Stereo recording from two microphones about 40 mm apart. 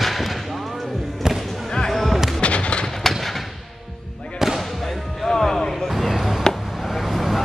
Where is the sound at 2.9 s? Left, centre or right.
Centre.